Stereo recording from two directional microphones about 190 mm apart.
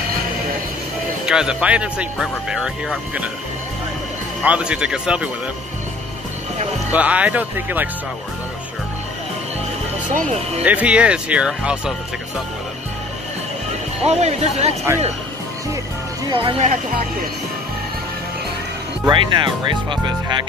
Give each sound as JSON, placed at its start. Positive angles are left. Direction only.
{"t": 1.2, "sound": "speech", "side_deg": -5}
{"t": 4.4, "sound": "speech", "side_deg": -5}
{"t": 6.9, "sound": "speech", "side_deg": -5}
{"t": 10.6, "sound": "speech", "side_deg": -5}
{"t": 14.0, "sound": "speech", "side_deg": -35}
{"t": 16.3, "sound": "speech", "side_deg": -25}
{"t": 19.0, "sound": "speech", "side_deg": -25}